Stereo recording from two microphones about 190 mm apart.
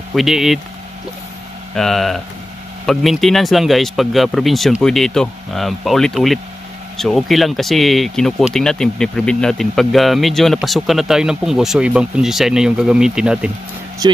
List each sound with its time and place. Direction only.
0.1 s speech: centre (ahead or behind)
1.8 s speech: centre (ahead or behind)
14.0 s speech: 20° right (ahead or behind)